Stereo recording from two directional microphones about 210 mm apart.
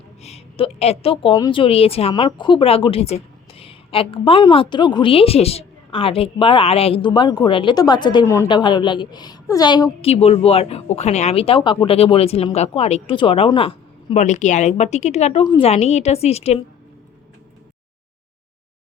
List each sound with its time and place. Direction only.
0.2 s a woman's voice: 30° left (ahead or behind)